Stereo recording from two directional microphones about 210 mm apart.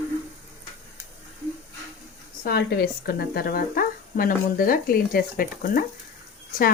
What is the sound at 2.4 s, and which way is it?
Speech, 50° left (ahead or behind).